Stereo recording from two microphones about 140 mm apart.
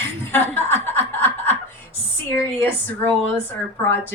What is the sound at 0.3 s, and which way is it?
Chuckle, 15° left (ahead or behind).